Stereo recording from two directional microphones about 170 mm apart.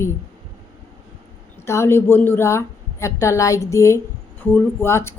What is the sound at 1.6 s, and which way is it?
A woman's voice, 15° left (ahead or behind).